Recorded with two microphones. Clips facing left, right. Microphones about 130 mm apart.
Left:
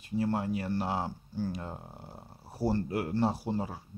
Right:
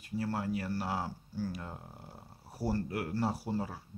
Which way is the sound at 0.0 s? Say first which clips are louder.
Left 4 dB; 20° left (ahead or behind).